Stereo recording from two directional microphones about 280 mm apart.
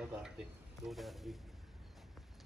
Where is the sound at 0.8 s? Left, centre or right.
Centre.